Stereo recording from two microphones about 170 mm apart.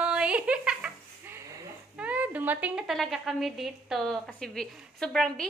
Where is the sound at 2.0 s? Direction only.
10° right (ahead or behind).